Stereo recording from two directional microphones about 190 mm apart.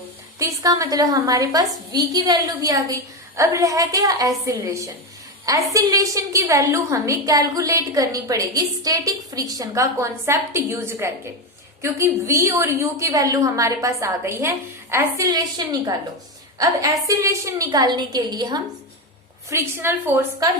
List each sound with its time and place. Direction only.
0.3 s a woman's voice: 15° right (ahead or behind)